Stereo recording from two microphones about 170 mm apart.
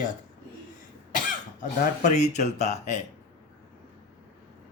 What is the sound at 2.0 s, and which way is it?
Speech, 45° left (ahead or behind).